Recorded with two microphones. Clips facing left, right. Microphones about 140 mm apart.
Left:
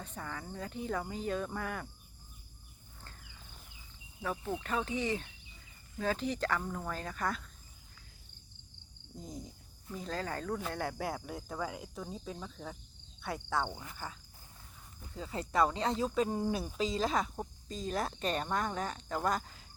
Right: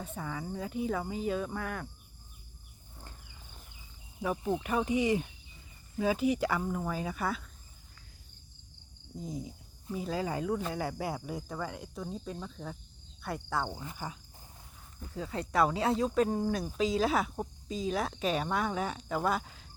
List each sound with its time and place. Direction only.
0.0 s speech: 5° right (ahead or behind)
3.0 s a sound: 15° right (ahead or behind)
4.2 s speech: 15° right (ahead or behind)
9.1 s speech: centre (ahead or behind)
10.6 s speech: centre (ahead or behind)
13.9 s speech: 15° right (ahead or behind)
15.0 s speech: centre (ahead or behind)